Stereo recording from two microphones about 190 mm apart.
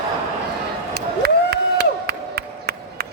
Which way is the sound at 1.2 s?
60° right (ahead or behind).